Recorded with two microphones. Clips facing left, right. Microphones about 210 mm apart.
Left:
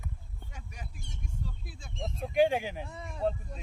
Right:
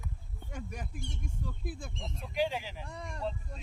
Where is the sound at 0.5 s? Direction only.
50° right (ahead or behind).